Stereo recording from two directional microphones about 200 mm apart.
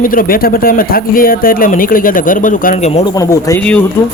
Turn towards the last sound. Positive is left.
turn(degrees=40)  # may be behind; listen again after turning